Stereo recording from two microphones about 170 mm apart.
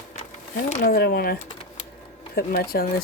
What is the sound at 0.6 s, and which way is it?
Speech, 60° left (ahead or behind).